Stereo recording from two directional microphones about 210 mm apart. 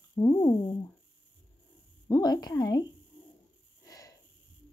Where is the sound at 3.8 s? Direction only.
15° left (ahead or behind).